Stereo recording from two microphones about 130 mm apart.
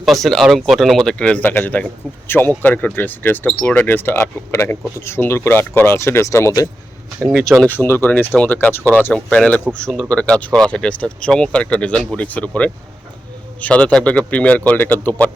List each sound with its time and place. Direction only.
0.0 s speech: centre (ahead or behind); by 6.7 s 25° left (ahead or behind)
7.7 s speech: 15° left (ahead or behind)